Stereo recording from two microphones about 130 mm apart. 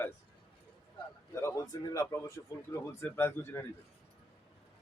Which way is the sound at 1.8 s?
30° left (ahead or behind).